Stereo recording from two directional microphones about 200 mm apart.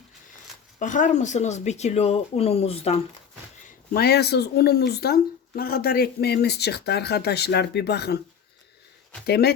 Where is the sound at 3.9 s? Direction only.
50° left (ahead or behind).